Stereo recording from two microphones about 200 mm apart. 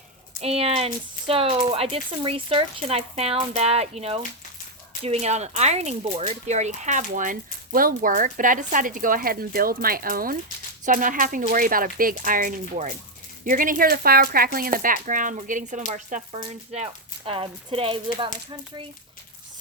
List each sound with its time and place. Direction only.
0.3 s speech: 30° right (ahead or behind)